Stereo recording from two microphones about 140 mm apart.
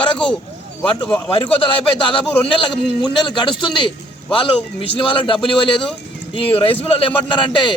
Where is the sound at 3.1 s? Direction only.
35° left (ahead or behind).